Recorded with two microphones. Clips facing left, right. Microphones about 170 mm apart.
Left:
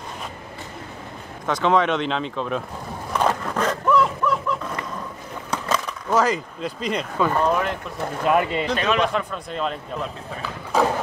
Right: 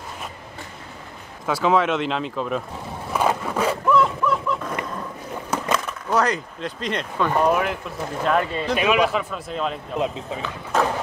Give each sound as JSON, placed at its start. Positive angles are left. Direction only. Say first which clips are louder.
{"t": 1.4, "sound": "speech", "louder": "even", "side_deg": -5}
{"t": 3.1, "sound": "skateboard", "louder": "even", "side_deg": -5}
{"t": 5.5, "sound": "speech", "louder": "right 1 dB", "side_deg": -5}
{"t": 7.3, "sound": "speech", "louder": "right 4 dB", "side_deg": -10}
{"t": 8.2, "sound": "speech", "louder": "left 2 dB", "side_deg": 10}
{"t": 8.6, "sound": "speech", "louder": "right 2 dB", "side_deg": -10}